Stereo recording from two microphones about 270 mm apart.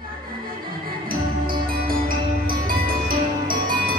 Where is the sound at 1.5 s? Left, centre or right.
Right.